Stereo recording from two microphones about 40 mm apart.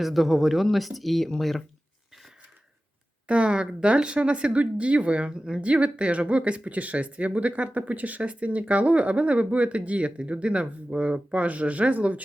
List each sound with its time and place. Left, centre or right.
0.0 s speech: centre
3.2 s speech: right
5.3 s speech: centre
5.6 s speech: right